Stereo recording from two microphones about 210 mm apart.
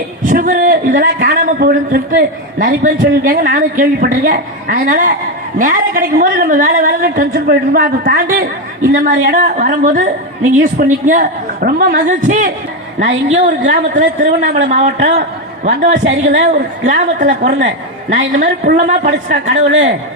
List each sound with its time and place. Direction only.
0.2 s a man's voice: 40° right (ahead or behind)
19.7 s a man's voice: 60° right (ahead or behind)